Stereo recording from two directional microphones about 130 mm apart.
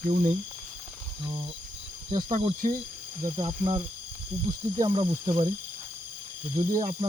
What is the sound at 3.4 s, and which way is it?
Speech, 40° right (ahead or behind).